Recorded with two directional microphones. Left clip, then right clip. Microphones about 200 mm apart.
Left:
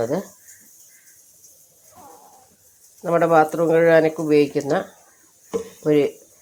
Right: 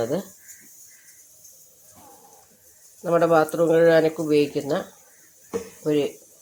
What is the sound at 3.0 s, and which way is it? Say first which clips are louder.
Speech: left 2 dB; 10° left (ahead or behind).